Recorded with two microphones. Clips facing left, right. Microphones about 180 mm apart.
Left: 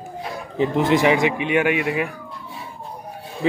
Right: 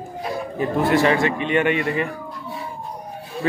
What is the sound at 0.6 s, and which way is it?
A man's voice, 20° left (ahead or behind).